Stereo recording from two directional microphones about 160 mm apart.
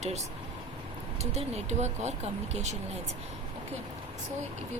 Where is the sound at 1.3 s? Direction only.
45° right (ahead or behind).